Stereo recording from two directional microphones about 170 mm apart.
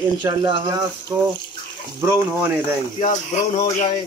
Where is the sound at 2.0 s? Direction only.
15° right (ahead or behind).